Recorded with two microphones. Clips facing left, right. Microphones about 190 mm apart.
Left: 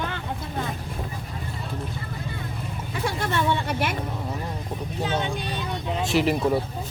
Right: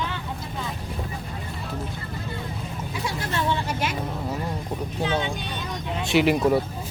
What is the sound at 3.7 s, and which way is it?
Speech, 55° left (ahead or behind).